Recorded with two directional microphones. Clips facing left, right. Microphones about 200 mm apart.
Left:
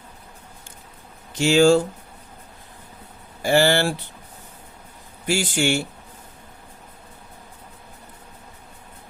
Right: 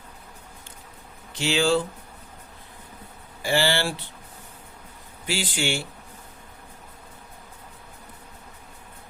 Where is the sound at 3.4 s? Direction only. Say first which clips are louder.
Left 6 dB; 45° left (ahead or behind).